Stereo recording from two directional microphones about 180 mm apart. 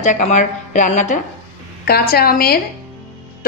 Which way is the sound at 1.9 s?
60° left (ahead or behind).